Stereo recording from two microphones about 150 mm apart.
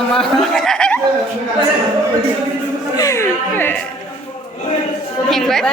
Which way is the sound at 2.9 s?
20° left (ahead or behind).